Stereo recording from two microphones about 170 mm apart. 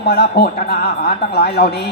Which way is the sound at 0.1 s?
70° left (ahead or behind).